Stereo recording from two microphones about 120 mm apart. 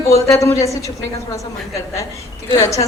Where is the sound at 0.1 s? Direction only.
25° left (ahead or behind).